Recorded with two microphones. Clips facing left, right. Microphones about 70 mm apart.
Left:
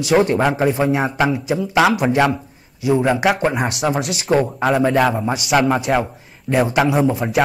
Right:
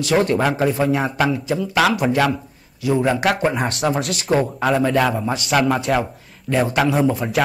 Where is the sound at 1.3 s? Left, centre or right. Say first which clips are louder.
Left 2 dB; centre.